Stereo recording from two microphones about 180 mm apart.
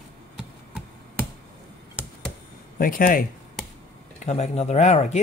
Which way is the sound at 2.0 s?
5° right (ahead or behind).